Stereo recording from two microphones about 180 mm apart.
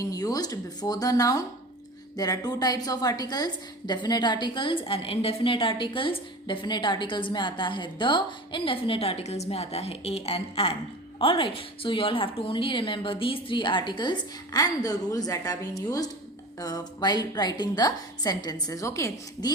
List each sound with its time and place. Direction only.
0.0 s a woman's voice: 20° left (ahead or behind)
16.6 s a woman's voice: 20° left (ahead or behind)